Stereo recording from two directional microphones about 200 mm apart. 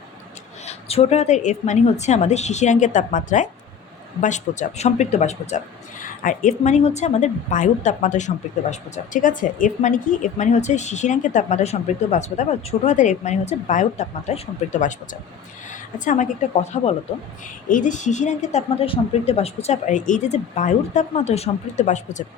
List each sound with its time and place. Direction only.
0.6 s speech: 30° left (ahead or behind)
16.0 s speech: 35° left (ahead or behind)